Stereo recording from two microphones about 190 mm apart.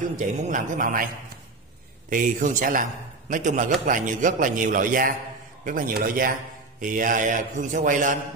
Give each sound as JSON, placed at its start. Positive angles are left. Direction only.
{"t": 0.2, "sound": "a man's voice", "side_deg": -45}
{"t": 2.0, "sound": "a man's voice", "side_deg": -45}